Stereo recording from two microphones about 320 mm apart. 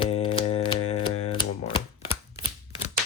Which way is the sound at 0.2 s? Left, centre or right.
Centre.